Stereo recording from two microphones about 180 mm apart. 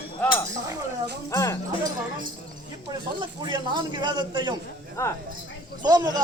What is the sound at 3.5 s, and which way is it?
A man's voice, 25° right (ahead or behind).